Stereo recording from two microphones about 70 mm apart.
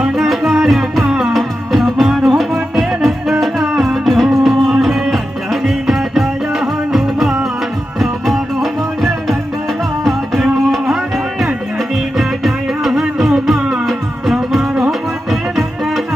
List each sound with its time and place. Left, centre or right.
0.2 s music: centre
10.3 s music: centre